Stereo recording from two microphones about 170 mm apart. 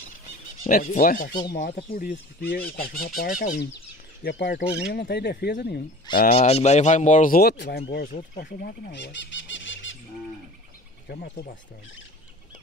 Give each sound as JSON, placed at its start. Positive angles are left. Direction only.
{"t": 0.7, "sound": "speech", "side_deg": 55}
{"t": 1.5, "sound": "speech", "side_deg": 80}
{"t": 2.0, "sound": "speech", "side_deg": 70}
{"t": 4.2, "sound": "speech", "side_deg": 90}
{"t": 6.3, "sound": "speech", "side_deg": 40}
{"t": 7.9, "sound": "speech", "side_deg": 60}
{"t": 8.5, "sound": "speech", "side_deg": 80}
{"t": 11.1, "sound": "speech", "side_deg": 65}